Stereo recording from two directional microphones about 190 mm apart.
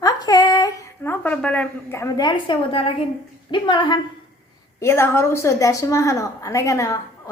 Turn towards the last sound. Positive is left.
turn(degrees=15)  # may be behind; listen again after turning